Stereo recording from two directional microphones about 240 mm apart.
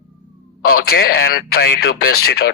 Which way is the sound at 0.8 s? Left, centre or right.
Left.